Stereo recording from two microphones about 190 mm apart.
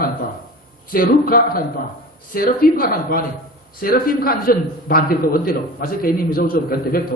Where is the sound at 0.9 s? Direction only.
50° left (ahead or behind).